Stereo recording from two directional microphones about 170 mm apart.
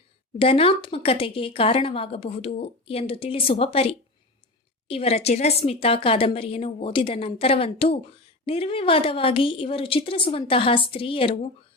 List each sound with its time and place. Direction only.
0.3 s speech: 35° left (ahead or behind)